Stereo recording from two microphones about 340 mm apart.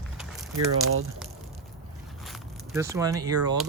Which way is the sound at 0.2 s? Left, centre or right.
Centre.